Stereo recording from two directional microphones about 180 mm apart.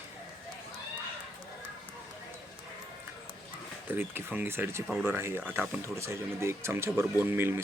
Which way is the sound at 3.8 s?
10° right (ahead or behind).